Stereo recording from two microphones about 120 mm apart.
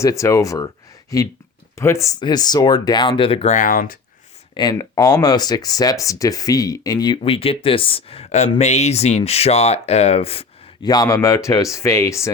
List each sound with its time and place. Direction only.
0.0 s speech: 25° left (ahead or behind)
1.7 s speech: 25° left (ahead or behind)
2.1 s speech: 35° left (ahead or behind); by 3.5 s 50° left (ahead or behind)
4.5 s speech: 35° left (ahead or behind)
7.2 s speech: 50° left (ahead or behind)
10.8 s speech: 30° left (ahead or behind)